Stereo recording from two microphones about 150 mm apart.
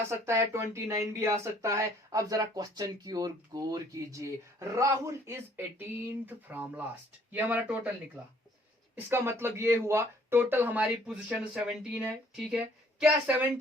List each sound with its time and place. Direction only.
0.1 s speech: 20° right (ahead or behind)